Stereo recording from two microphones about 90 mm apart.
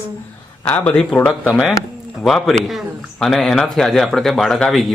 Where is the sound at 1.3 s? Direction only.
5° right (ahead or behind).